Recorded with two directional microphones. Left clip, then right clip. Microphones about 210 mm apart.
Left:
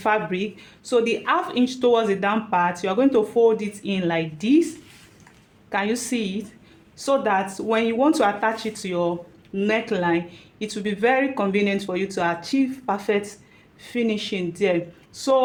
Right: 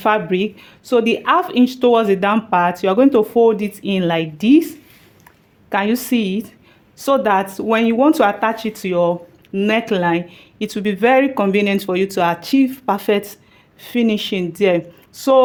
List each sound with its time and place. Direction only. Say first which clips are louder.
0.0 s a woman's voice: right 6 dB; 45° right (ahead or behind)